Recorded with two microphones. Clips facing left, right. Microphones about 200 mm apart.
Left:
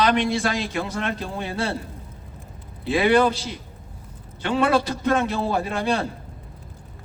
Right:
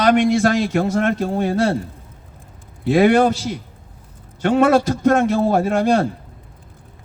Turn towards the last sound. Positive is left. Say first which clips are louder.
# right 7 dB
turn(degrees=-45)  # may be behind; listen again after turning